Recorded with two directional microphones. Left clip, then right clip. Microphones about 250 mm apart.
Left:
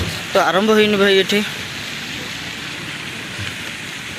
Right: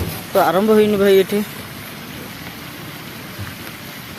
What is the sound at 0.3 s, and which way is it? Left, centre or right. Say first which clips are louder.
Speech: even; centre.